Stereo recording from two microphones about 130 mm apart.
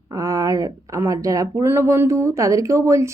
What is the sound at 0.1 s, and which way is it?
Speech, 25° right (ahead or behind).